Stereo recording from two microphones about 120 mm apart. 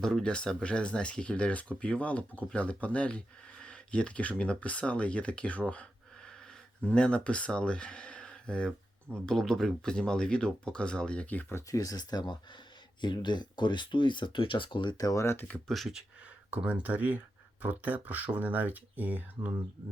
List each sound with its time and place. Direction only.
0.0 s speech: 5° left (ahead or behind)
15.7 s speech: centre (ahead or behind)